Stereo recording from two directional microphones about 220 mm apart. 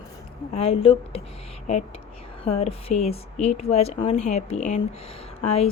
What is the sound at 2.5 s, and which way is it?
Speech, 30° left (ahead or behind).